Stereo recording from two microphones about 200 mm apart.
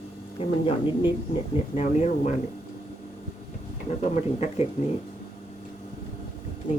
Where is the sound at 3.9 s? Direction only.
35° left (ahead or behind).